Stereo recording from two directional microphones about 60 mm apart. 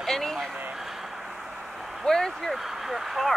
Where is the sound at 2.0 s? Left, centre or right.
Centre.